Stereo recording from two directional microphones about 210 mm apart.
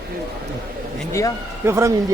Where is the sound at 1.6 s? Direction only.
15° right (ahead or behind).